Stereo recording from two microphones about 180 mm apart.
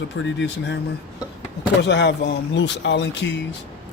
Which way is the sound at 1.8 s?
70° left (ahead or behind).